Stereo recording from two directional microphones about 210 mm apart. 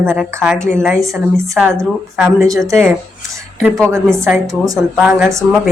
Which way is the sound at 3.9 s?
15° right (ahead or behind).